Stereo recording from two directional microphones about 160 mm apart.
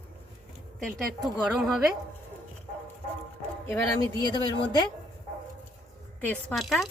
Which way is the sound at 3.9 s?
30° left (ahead or behind).